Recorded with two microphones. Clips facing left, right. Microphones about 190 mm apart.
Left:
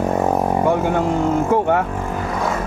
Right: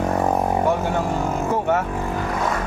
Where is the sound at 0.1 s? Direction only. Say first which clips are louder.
Left 2 dB; 5° left (ahead or behind).